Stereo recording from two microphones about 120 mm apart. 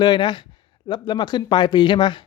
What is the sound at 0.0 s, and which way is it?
Speech, 40° left (ahead or behind).